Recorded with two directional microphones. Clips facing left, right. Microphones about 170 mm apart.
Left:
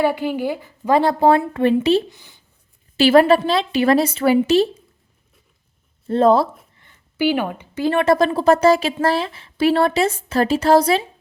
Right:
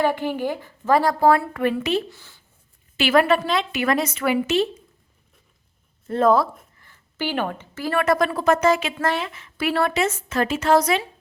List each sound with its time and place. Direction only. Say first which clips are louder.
0.0 s a woman's voice: left 3 dB; 10° left (ahead or behind); by 2.0 s 30° left (ahead or behind)
2.0 s speech: even; 15° left (ahead or behind)
3.0 s a woman's voice: left 6 dB; 30° left (ahead or behind)
6.1 s a woman's voice: left 3 dB; 30° left (ahead or behind)
7.2 s a woman's voice: left 6 dB; 10° left (ahead or behind); by 11.0 s 30° left (ahead or behind)